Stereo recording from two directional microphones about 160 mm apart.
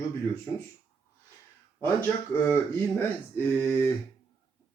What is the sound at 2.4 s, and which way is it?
Speech, 15° left (ahead or behind).